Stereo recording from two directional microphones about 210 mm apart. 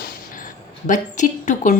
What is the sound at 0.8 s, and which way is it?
Speech, 35° left (ahead or behind).